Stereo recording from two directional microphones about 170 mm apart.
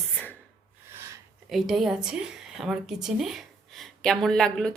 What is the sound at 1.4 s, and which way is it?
Speech, centre (ahead or behind).